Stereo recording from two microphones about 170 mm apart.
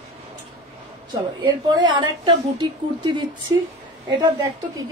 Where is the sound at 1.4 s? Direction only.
25° right (ahead or behind).